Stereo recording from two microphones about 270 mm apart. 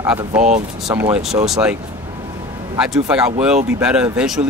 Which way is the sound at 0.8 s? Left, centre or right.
Centre.